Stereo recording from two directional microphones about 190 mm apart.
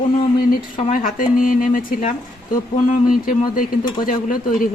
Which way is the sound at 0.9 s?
45° left (ahead or behind).